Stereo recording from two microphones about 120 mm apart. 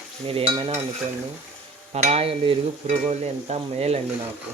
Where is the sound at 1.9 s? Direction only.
60° right (ahead or behind).